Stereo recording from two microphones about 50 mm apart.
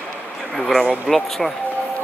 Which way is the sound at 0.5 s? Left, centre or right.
Centre.